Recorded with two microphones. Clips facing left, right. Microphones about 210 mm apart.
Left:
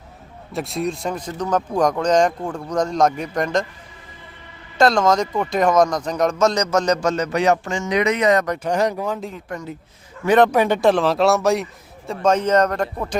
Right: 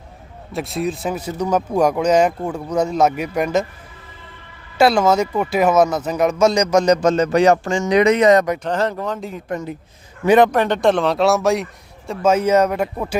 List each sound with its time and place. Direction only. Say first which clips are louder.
0.5 s speech: right 1 dB; centre (ahead or behind)
4.8 s speech: right 2 dB; 5° right (ahead or behind)
7.3 s speech: right 4 dB; 35° right (ahead or behind)
8.5 s speech: left 1 dB; 10° left (ahead or behind)
9.5 s speech: right 7 dB; 20° right (ahead or behind)
10.2 s speech: right 2 dB; 10° right (ahead or behind)
10.5 s a man's voice: even; 10° left (ahead or behind); by 13.1 s 5° right (ahead or behind)